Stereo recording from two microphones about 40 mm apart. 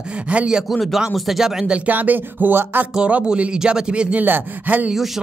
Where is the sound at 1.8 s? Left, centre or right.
Right.